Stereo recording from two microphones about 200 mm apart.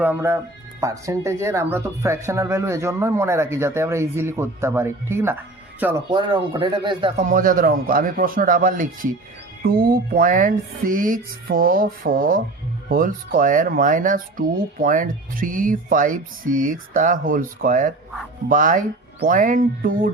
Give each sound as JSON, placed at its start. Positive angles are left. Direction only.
{"t": 0.0, "sound": "speech", "side_deg": -10}
{"t": 6.1, "sound": "speech", "side_deg": -20}
{"t": 7.2, "sound": "speech", "side_deg": -40}